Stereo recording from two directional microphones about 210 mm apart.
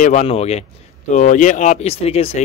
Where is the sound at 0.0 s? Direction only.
35° left (ahead or behind).